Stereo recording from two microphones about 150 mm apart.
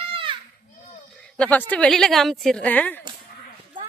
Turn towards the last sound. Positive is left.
turn(degrees=10)  # may be behind; listen again after turning